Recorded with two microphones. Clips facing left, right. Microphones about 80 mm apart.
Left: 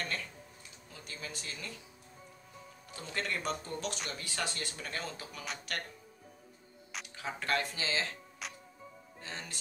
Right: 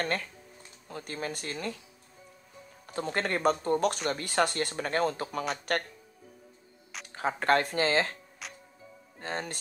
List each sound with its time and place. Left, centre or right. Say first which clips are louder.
0.0 s speech: right 7 dB; right
2.9 s speech: right 8 dB; right
7.1 s speech: right 9 dB; right
8.4 s music: even; centre
9.2 s speech: right 10 dB; right